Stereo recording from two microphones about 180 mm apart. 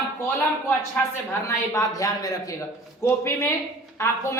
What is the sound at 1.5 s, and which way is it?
A woman's voice, 20° left (ahead or behind).